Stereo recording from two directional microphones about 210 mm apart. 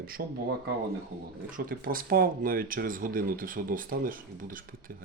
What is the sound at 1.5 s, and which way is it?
Speech, 45° right (ahead or behind).